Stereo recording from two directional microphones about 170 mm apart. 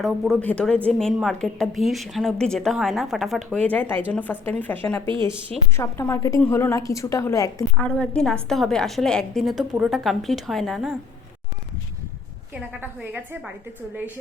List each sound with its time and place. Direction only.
0.0 s a woman's voice: 5° left (ahead or behind)
7.9 s a woman's voice: 5° left (ahead or behind)
12.5 s a woman's voice: 10° right (ahead or behind)